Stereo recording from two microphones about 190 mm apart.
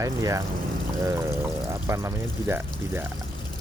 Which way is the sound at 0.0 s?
15° right (ahead or behind).